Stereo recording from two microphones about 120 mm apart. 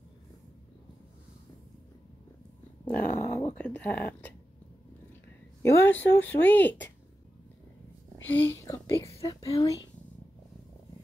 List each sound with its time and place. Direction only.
2.9 s dog: 15° left (ahead or behind)
3.5 s speech: 10° left (ahead or behind)
5.6 s speech: 20° left (ahead or behind)
8.3 s speech: 20° left (ahead or behind)